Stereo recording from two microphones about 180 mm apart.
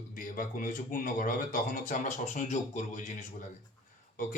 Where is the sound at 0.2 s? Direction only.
50° left (ahead or behind).